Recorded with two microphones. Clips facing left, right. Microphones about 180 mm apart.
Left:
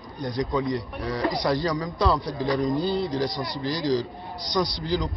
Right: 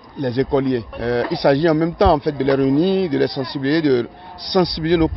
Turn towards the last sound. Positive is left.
turn(degrees=-70)  # may be behind; listen again after turning